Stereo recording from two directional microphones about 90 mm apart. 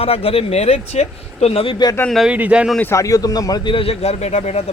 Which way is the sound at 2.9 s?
40° left (ahead or behind).